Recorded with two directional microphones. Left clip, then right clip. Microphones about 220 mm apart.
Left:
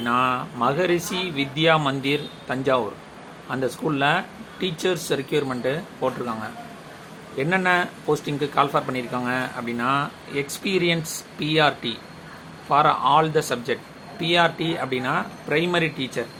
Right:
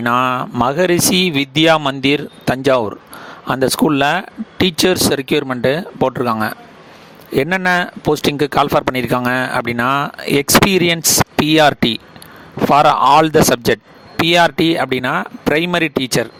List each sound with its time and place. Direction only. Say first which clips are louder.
0.0 s speech: right 7 dB; 55° right (ahead or behind)